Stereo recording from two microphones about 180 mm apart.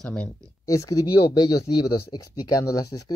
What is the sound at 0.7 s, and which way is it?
Speech, 20° left (ahead or behind).